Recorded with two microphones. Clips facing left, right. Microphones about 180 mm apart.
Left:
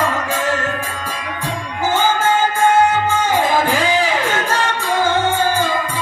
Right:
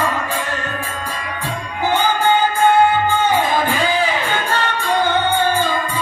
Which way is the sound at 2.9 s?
90° left.